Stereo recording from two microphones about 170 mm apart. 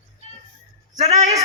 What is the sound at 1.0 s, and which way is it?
Speech, 40° right (ahead or behind).